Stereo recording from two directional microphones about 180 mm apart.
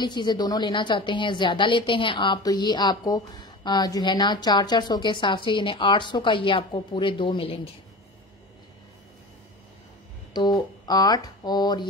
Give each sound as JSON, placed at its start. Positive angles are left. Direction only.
{"t": 0.0, "sound": "a woman's voice", "side_deg": 25}
{"t": 10.3, "sound": "speech", "side_deg": 25}